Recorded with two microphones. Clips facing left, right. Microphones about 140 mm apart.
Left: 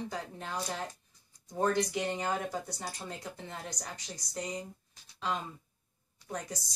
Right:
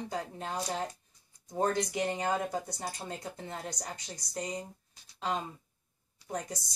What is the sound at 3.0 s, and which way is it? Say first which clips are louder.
Speech: right 2 dB; 35° right (ahead or behind).